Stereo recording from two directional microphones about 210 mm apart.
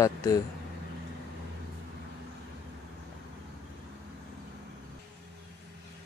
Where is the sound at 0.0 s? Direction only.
15° left (ahead or behind).